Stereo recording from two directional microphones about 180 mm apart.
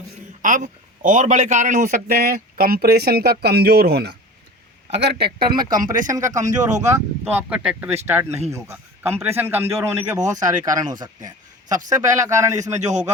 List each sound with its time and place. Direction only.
0.4 s a man's voice: 45° right (ahead or behind); by 5.5 s 65° right (ahead or behind)
5.5 s speech: 25° right (ahead or behind)
5.7 s speech: 45° right (ahead or behind)
6.1 s a man's voice: 20° right (ahead or behind)